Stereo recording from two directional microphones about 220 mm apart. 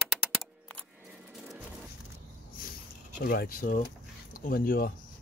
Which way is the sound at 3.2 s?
45° left (ahead or behind).